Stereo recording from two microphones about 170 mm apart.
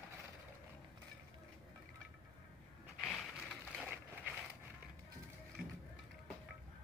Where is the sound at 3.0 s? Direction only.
Centre (ahead or behind).